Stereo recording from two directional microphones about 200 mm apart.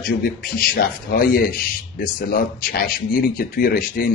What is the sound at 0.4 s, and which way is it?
Speech, 45° left (ahead or behind).